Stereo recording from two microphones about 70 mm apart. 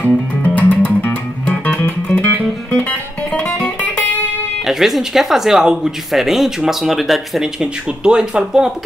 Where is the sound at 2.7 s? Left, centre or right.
Left.